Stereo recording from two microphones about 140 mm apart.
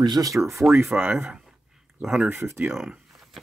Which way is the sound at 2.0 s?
5° right (ahead or behind).